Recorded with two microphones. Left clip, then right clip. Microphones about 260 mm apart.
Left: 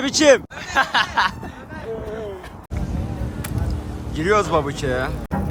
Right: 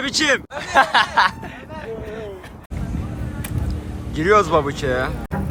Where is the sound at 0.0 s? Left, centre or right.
Centre.